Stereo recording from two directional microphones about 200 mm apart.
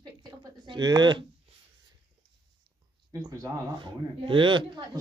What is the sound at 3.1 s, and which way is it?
A man's voice, 20° right (ahead or behind).